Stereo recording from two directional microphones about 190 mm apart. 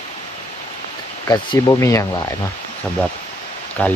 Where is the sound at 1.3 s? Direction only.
20° left (ahead or behind).